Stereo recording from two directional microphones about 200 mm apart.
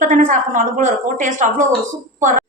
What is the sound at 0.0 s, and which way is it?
A woman's voice, 40° right (ahead or behind).